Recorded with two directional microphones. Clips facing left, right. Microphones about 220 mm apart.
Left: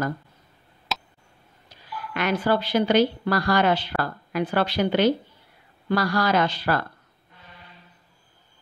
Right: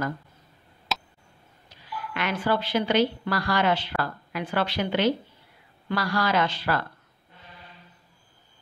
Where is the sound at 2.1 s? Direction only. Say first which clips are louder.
Left 4 dB; 40° left (ahead or behind).